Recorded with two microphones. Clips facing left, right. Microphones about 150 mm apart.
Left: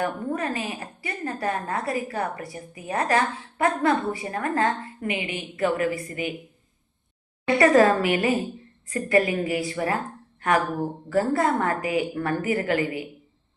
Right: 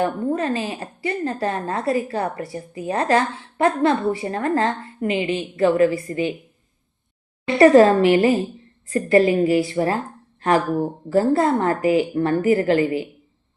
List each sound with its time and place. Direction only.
0.0 s a woman's voice: 30° right (ahead or behind)
7.4 s a woman's voice: 25° right (ahead or behind)
11.1 s a woman's voice: 30° right (ahead or behind)